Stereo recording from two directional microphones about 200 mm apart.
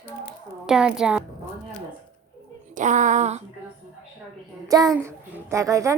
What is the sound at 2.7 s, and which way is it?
Speech, 40° right (ahead or behind).